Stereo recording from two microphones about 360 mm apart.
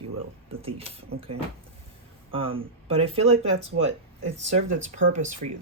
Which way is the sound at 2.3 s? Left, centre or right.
Centre.